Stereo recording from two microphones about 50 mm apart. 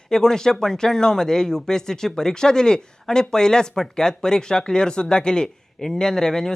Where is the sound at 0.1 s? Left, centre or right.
Centre.